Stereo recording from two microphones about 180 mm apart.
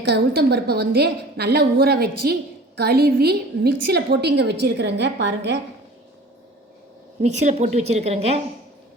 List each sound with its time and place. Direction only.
0.0 s a woman's voice: 65° right (ahead or behind)
7.2 s a woman's voice: 40° right (ahead or behind)